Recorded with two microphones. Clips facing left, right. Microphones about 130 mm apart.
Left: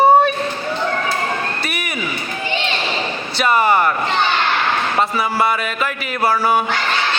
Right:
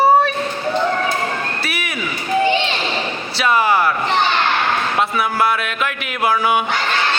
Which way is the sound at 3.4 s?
Centre (ahead or behind).